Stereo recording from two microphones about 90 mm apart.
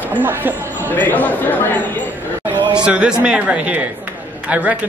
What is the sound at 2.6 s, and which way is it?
Chatter, 55° right (ahead or behind).